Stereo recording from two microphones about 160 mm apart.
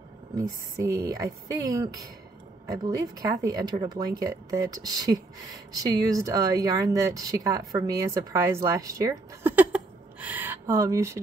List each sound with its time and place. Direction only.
0.4 s a woman's voice: 20° right (ahead or behind)